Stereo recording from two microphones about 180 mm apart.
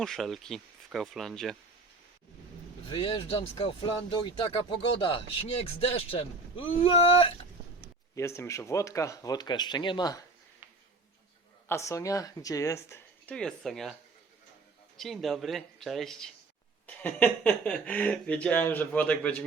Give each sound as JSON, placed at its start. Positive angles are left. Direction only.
{"t": 0.0, "sound": "speech", "side_deg": 0}
{"t": 2.9, "sound": "speech", "side_deg": 25}
{"t": 8.1, "sound": "speech", "side_deg": 15}
{"t": 11.7, "sound": "speech", "side_deg": 15}
{"t": 14.9, "sound": "speech", "side_deg": 0}